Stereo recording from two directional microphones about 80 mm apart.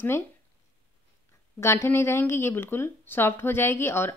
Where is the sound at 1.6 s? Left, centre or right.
Left.